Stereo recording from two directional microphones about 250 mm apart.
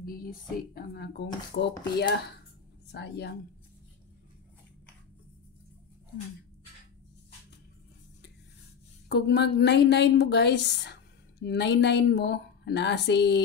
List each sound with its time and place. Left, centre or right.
0.0 s a woman's voice: left
9.1 s a woman's voice: left